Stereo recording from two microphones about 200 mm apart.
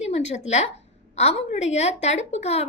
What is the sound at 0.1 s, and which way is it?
A woman's voice, 35° left (ahead or behind).